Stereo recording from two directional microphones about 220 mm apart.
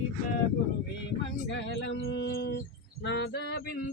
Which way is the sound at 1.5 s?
55° left (ahead or behind).